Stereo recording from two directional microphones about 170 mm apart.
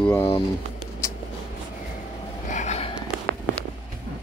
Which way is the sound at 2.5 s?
45° left (ahead or behind).